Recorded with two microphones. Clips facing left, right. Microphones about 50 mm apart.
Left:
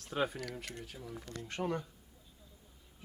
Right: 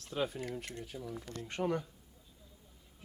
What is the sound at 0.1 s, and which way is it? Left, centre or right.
Speech, left.